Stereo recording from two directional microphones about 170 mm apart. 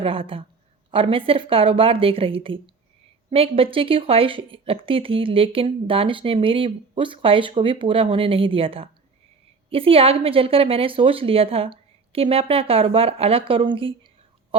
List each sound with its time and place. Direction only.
0.0 s speech: 30° right (ahead or behind)